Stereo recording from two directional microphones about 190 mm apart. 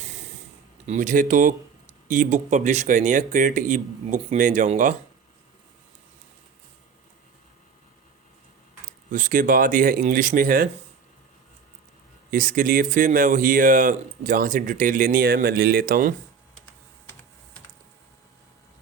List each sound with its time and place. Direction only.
0.9 s speech: 40° right (ahead or behind)
9.0 s speech: 45° right (ahead or behind)
12.3 s speech: 45° right (ahead or behind)